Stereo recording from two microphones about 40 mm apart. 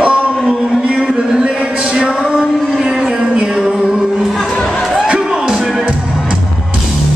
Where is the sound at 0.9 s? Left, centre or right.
Centre.